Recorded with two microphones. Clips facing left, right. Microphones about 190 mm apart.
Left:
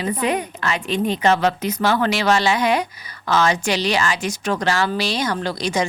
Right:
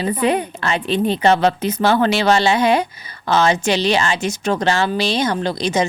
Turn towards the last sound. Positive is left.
turn(degrees=-25)  # may be behind; listen again after turning